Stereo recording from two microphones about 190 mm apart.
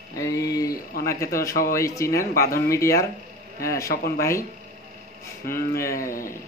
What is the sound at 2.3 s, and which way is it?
Speech, 50° left (ahead or behind).